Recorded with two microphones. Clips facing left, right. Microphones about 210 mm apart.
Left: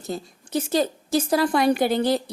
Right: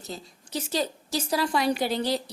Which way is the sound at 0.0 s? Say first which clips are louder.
Left 8 dB; 50° left (ahead or behind).